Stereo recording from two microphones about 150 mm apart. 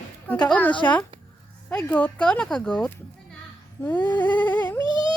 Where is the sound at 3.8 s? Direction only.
15° left (ahead or behind).